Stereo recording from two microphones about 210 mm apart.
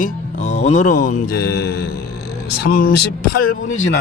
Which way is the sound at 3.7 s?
70° left (ahead or behind).